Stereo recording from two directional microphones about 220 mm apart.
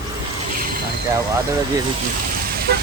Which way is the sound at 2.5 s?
45° right (ahead or behind).